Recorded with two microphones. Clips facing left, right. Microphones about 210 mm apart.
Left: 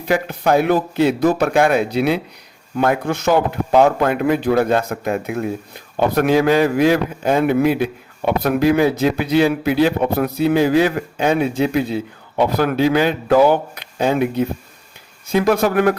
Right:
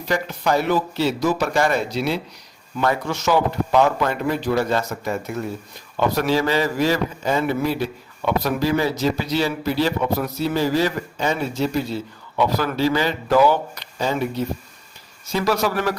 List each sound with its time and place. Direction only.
0.0 s speech: 55° left (ahead or behind)